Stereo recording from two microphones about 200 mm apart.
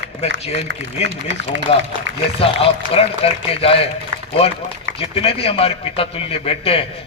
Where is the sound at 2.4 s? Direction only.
30° left (ahead or behind).